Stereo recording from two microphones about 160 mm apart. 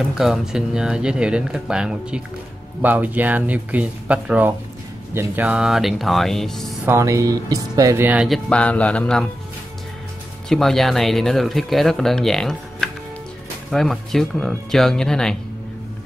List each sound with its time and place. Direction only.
0.1 s speech: 5° right (ahead or behind)
6.9 s speech: 20° right (ahead or behind)
8.5 s speech: 10° left (ahead or behind)
10.5 s speech: centre (ahead or behind)